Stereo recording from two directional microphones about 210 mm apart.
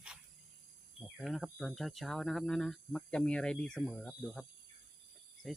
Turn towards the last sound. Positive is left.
turn(degrees=0)  # may be behind; listen again after turning